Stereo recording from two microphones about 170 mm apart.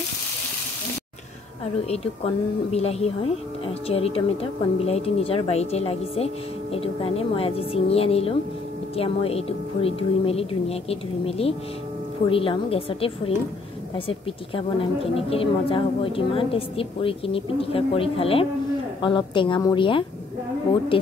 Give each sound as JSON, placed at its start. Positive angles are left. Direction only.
{"t": 1.9, "sound": "a woman's voice", "side_deg": 35}